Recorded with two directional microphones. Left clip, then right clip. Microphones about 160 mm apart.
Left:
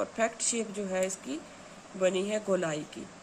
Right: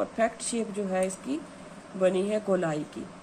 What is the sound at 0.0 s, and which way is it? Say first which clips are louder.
A woman's voice: right 3 dB; 15° left (ahead or behind).